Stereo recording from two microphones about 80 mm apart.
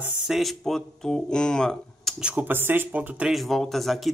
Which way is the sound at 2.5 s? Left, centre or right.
Right.